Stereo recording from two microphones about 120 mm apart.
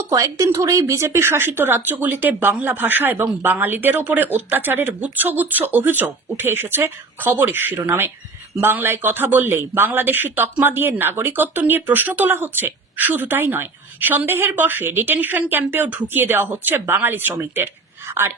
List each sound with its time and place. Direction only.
0.1 s speech: 25° right (ahead or behind)